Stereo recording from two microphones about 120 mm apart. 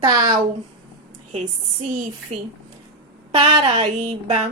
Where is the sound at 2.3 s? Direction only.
60° right (ahead or behind).